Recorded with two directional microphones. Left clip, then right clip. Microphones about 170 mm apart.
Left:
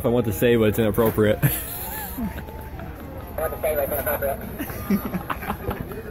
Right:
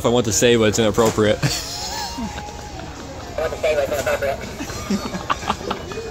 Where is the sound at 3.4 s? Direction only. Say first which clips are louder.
Right 4 dB; 20° right (ahead or behind).